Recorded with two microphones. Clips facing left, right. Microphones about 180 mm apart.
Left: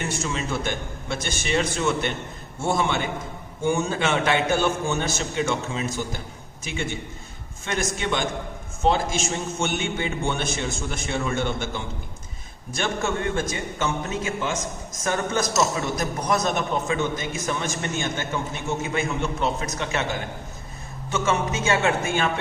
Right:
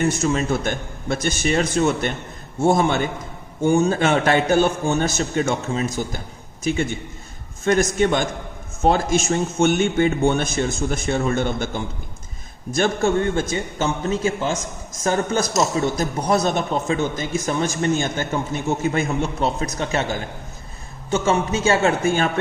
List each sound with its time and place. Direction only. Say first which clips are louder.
0.0 s a man's voice: right 8 dB; 45° right (ahead or behind)
12.7 s a man's voice: right 7 dB; 35° right (ahead or behind)
21.1 s a man's voice: right 4 dB; 30° right (ahead or behind)